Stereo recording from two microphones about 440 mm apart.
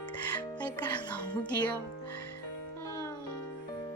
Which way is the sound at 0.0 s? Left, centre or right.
Centre.